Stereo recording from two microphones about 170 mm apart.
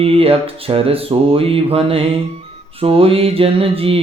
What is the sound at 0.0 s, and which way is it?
Mantra, 35° right (ahead or behind).